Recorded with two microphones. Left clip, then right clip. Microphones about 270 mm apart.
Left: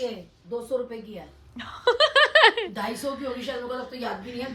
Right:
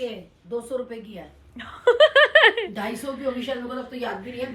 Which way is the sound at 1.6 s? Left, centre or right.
Centre.